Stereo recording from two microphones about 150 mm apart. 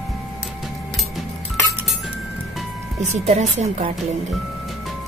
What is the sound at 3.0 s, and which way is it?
Speech, 50° right (ahead or behind).